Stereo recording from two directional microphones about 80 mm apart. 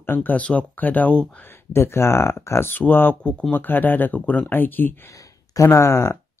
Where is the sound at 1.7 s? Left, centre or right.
Left.